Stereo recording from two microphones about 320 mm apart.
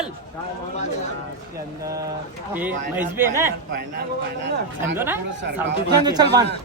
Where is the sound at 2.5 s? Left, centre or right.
Centre.